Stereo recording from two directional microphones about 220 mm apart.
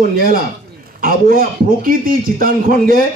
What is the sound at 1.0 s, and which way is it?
A man's voice, 40° right (ahead or behind).